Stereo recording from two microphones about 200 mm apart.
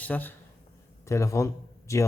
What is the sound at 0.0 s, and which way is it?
A man's voice, 10° left (ahead or behind).